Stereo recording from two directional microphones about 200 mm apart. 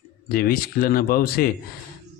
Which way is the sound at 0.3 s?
50° left (ahead or behind).